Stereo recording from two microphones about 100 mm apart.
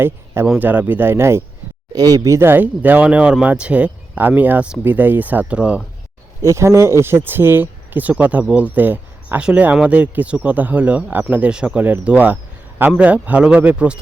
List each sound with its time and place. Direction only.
0.6 s speech: 20° right (ahead or behind)
1.9 s speech: 40° right (ahead or behind); by 5.8 s 10° right (ahead or behind)
6.4 s speech: 30° right (ahead or behind); by 14.0 s 10° right (ahead or behind)